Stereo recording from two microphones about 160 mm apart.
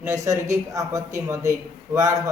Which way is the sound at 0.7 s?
20° right (ahead or behind).